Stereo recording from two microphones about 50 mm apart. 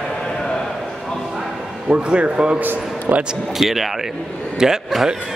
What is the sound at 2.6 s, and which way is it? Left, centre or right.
Speech, right.